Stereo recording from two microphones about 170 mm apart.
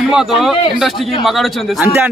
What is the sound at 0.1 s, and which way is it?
Speech, centre (ahead or behind).